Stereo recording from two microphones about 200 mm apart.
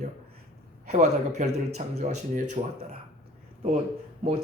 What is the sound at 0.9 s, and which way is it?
A woman's voice, 35° right (ahead or behind).